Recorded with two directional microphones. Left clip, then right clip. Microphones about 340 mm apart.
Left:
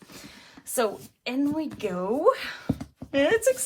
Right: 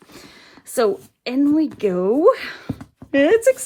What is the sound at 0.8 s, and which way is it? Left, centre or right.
Speech, right.